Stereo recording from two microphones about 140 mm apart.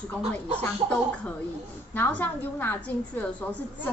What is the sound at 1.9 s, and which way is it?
A woman's voice, 10° left (ahead or behind).